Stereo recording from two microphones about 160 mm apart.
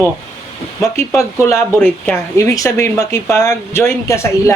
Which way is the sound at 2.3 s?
20° left (ahead or behind).